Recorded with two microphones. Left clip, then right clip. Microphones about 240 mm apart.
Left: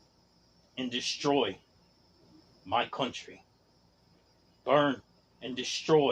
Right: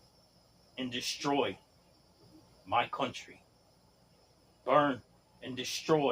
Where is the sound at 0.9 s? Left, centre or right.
Left.